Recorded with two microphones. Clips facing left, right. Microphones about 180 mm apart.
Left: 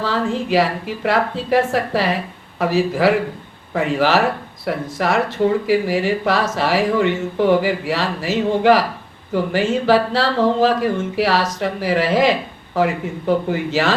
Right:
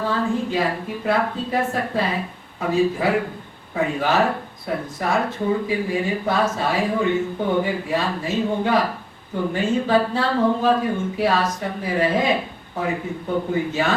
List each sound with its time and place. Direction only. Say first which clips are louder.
0.0 s speech: left 1 dB; 85° left